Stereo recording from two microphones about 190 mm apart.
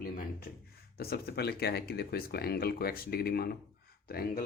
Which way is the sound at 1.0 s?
55° left (ahead or behind).